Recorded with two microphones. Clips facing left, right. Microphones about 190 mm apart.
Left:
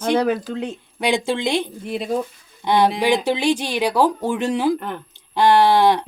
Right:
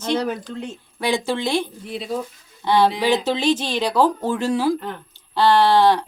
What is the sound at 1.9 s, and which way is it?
Speech, 55° left (ahead or behind).